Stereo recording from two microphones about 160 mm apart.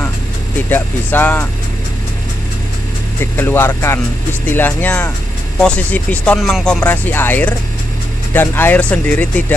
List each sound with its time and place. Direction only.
0.7 s speech: 10° left (ahead or behind)
3.3 s speech: 15° left (ahead or behind)